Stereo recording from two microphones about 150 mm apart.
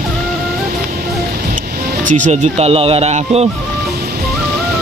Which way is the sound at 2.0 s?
60° right (ahead or behind).